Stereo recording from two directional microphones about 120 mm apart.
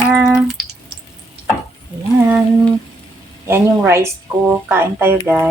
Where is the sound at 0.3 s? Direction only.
5° right (ahead or behind).